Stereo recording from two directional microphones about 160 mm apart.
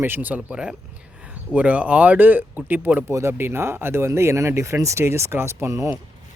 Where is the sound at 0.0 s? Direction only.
10° right (ahead or behind).